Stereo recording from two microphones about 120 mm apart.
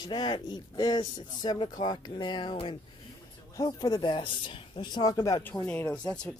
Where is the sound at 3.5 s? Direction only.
30° left (ahead or behind).